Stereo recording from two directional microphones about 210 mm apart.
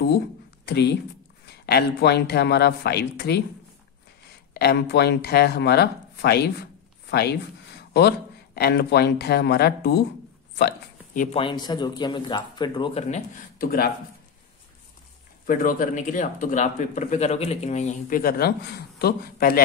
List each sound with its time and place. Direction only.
0.7 s speech: 50° left (ahead or behind)
4.6 s speech: 50° left (ahead or behind)
8.5 s speech: 50° left (ahead or behind)
11.3 s a man's voice: 20° left (ahead or behind)
13.6 s speech: 45° left (ahead or behind)
15.4 s speech: 40° left (ahead or behind)